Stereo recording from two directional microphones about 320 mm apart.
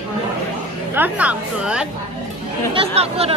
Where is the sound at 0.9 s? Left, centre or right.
Centre.